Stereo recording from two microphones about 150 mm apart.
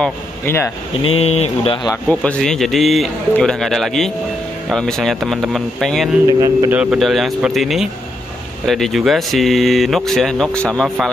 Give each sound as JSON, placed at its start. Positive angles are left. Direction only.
{"t": 0.0, "sound": "speech", "side_deg": 15}
{"t": 1.0, "sound": "speech", "side_deg": 40}
{"t": 2.0, "sound": "speech", "side_deg": 5}